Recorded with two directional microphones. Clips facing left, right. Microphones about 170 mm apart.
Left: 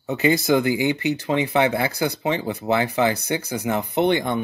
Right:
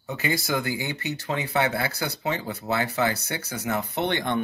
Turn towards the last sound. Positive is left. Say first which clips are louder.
# left 6 dB
turn(degrees=10)  # may be behind; listen again after turning